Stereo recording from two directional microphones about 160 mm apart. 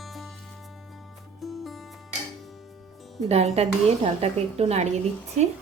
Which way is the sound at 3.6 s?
40° right (ahead or behind).